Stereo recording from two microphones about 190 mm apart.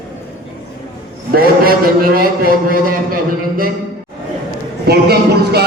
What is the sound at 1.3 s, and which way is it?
A man's voice, 50° right (ahead or behind).